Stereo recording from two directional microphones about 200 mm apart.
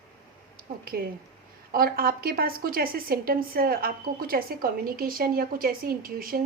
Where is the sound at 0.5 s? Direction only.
45° right (ahead or behind).